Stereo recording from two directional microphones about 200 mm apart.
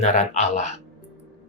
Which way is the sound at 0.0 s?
35° left (ahead or behind).